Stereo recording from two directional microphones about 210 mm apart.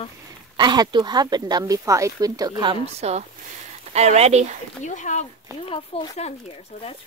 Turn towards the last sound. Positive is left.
turn(degrees=30)  # may be behind; listen again after turning